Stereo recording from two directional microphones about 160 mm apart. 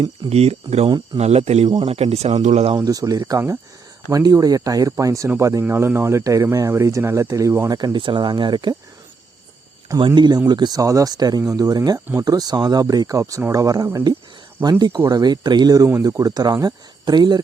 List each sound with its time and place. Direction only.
0.3 s speech: 40° right (ahead or behind)
0.9 s speech: 25° right (ahead or behind)
1.2 s speech: 40° right (ahead or behind)
1.7 s speech: 30° right (ahead or behind)
2.0 s speech: 40° right (ahead or behind)
2.7 s speech: 25° right (ahead or behind)
9.9 s speech: 25° right (ahead or behind)